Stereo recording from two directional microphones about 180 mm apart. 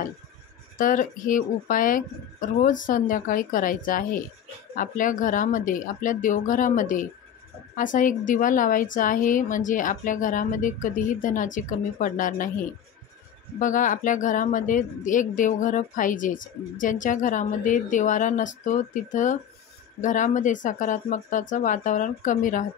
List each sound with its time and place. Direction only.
0.7 s speech: 50° left (ahead or behind)
13.6 s speech: 45° left (ahead or behind)